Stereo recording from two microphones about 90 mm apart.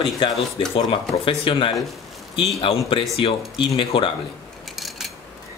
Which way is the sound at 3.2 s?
70° left (ahead or behind).